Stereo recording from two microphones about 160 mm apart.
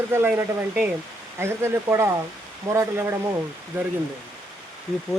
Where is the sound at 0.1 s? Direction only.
15° right (ahead or behind).